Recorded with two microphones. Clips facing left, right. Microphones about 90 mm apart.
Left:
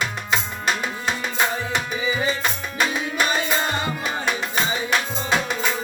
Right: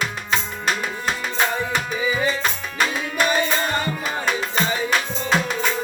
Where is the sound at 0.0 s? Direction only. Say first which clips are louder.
Even; centre (ahead or behind).